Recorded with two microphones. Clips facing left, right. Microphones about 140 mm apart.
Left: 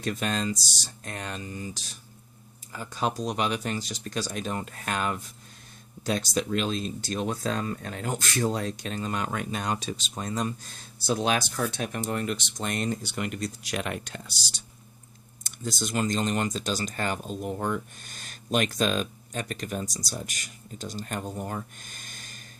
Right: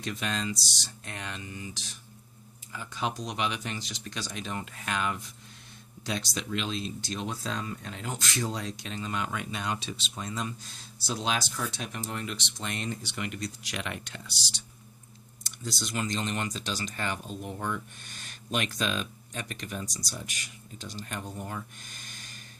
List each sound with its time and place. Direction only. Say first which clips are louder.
0.0 s speech: left 4 dB; 45° left (ahead or behind)